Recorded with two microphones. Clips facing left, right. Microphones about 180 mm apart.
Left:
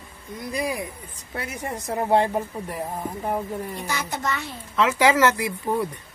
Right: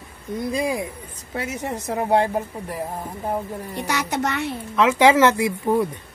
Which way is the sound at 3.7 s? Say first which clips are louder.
Right 5 dB; 70° right (ahead or behind).